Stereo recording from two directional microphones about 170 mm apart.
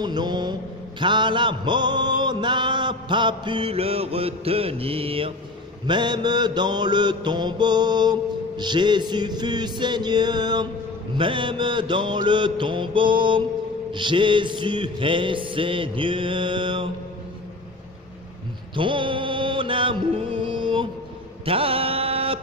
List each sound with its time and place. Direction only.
0.0 s mantra: 25° right (ahead or behind)
18.8 s music: 30° right (ahead or behind)
21.5 s mantra: 35° right (ahead or behind)